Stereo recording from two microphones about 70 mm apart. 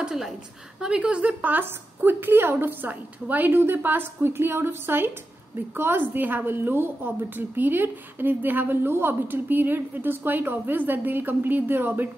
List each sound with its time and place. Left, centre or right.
0.0 s a woman's voice: centre
1.4 s a woman's voice: right